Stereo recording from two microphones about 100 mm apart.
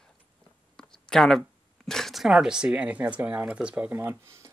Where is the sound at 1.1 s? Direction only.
5° left (ahead or behind); by 3.9 s 10° right (ahead or behind).